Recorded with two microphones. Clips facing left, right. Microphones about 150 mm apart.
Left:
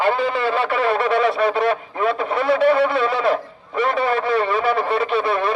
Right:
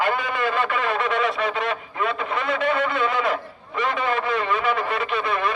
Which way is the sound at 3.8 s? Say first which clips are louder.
Left 4 dB; 35° left (ahead or behind).